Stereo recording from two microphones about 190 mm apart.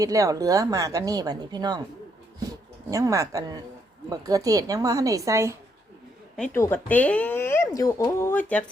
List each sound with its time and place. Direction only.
0.0 s a woman's voice: 15° right (ahead or behind)
2.9 s a woman's voice: 15° right (ahead or behind)
6.3 s speech: 5° left (ahead or behind)